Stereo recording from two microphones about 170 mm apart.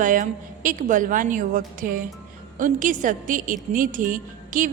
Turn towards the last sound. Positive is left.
turn(degrees=-50)  # may be behind; listen again after turning